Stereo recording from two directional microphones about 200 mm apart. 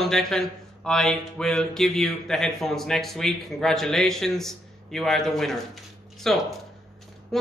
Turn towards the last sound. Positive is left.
turn(degrees=0)  # may be behind; listen again after turning